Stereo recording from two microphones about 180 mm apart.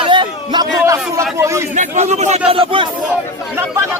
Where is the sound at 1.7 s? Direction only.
40° right (ahead or behind).